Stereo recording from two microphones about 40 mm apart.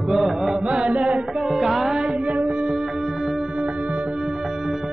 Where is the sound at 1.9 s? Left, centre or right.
Right.